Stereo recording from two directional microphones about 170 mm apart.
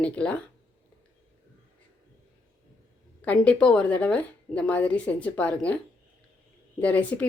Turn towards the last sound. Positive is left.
turn(degrees=10)  # may be behind; listen again after turning